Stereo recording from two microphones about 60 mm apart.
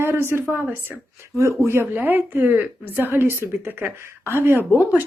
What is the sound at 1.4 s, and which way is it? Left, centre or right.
Speech, right.